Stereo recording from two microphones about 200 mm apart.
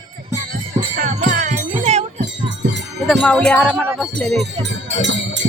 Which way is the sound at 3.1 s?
Centre (ahead or behind).